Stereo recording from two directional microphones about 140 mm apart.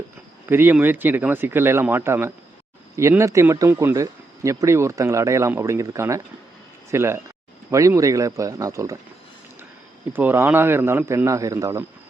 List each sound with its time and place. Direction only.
0.4 s speech: 15° right (ahead or behind)
10.1 s speech: 15° right (ahead or behind)